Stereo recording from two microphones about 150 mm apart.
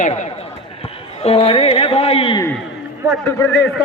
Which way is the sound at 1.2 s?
40° left (ahead or behind).